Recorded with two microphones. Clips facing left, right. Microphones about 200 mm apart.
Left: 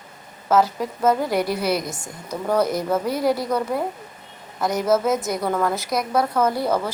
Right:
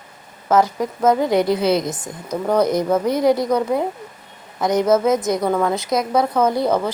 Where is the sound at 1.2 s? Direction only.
20° right (ahead or behind).